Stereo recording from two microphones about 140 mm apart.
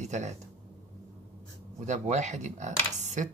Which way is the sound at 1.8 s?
55° right (ahead or behind).